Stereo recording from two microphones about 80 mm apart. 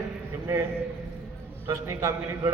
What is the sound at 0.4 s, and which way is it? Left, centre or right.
Speech, right.